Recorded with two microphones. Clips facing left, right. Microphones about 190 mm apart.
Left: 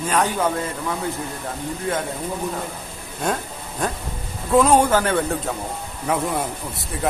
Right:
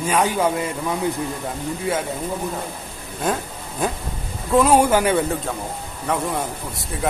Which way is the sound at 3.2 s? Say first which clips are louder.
Right 1 dB; 5° right (ahead or behind).